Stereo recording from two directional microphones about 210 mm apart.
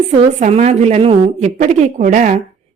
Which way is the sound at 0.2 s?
35° right (ahead or behind).